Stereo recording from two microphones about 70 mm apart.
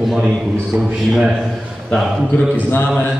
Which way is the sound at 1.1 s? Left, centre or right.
Centre.